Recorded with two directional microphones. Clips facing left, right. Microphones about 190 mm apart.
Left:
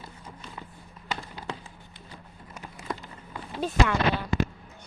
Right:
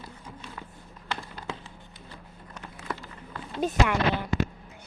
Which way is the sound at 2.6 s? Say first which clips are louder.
Left 1 dB; 15° left (ahead or behind).